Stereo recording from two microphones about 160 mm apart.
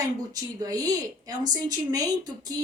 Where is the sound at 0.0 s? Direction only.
25° right (ahead or behind).